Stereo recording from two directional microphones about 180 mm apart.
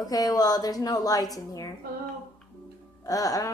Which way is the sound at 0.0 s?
20° left (ahead or behind).